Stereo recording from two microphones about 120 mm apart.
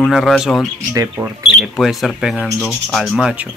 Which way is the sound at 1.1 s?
15° right (ahead or behind).